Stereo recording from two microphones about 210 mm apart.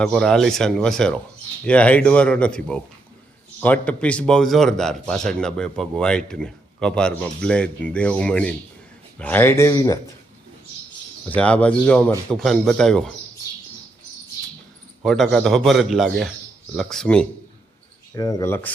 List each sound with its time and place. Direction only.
0.0 s a man's voice: centre (ahead or behind)
11.3 s a man's voice: 5° left (ahead or behind)
15.0 s a man's voice: centre (ahead or behind)
18.1 s speech: 15° left (ahead or behind)